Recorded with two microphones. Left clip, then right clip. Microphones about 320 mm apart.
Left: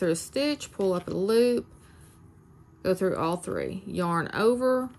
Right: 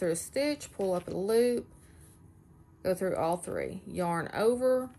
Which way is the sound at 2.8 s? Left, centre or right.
Centre.